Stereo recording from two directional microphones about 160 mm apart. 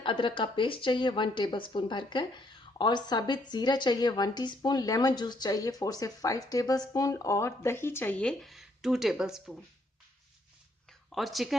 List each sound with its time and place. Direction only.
0.0 s a woman's voice: 30° left (ahead or behind); by 9.6 s 5° right (ahead or behind)
11.1 s a woman's voice: centre (ahead or behind)